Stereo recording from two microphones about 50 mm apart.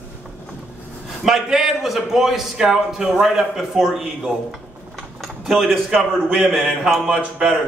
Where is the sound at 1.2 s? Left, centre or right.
Centre.